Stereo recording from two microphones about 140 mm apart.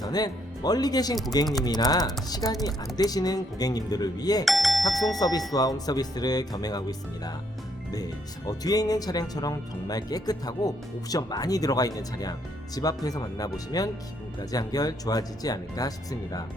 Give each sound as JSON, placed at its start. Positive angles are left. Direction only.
{"t": 0.0, "sound": "speech", "side_deg": 30}
{"t": 4.4, "sound": "music", "side_deg": 0}
{"t": 4.8, "sound": "speech", "side_deg": 25}
{"t": 7.9, "sound": "speech", "side_deg": 25}